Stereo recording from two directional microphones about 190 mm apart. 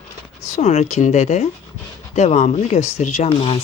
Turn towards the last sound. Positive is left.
turn(degrees=30)  # may be behind; listen again after turning